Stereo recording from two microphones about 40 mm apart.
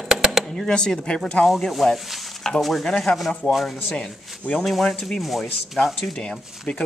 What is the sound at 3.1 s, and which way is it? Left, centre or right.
Speech, left.